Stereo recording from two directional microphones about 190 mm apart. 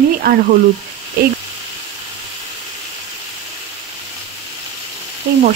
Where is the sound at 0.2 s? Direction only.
55° right (ahead or behind).